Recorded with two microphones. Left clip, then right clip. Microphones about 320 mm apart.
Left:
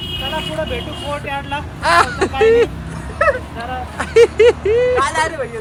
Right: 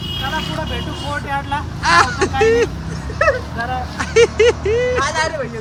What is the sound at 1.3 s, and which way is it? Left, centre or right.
Speech, centre.